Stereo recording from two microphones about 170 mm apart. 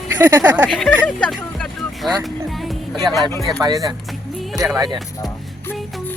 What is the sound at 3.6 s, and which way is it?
Speech, 20° right (ahead or behind).